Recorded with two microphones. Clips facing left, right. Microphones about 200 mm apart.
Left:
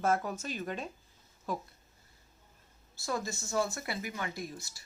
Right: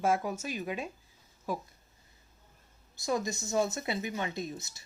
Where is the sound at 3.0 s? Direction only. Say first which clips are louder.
Right 4 dB; 20° right (ahead or behind).